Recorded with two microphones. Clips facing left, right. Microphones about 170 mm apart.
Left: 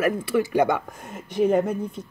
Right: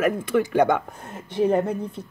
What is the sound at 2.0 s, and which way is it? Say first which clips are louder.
Speech: even; 30° right (ahead or behind).